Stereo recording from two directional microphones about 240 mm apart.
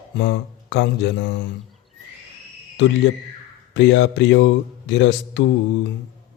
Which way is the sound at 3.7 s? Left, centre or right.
Left.